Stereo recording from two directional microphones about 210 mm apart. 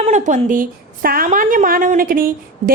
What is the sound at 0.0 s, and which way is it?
A woman's voice, 35° right (ahead or behind).